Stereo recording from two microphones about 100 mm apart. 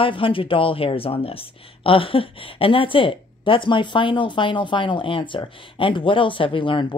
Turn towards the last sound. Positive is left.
turn(degrees=60)  # may be behind; listen again after turning